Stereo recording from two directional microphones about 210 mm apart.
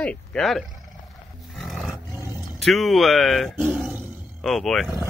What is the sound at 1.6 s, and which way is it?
Roar, centre (ahead or behind).